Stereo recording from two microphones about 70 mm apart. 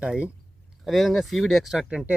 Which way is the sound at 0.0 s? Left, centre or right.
Centre.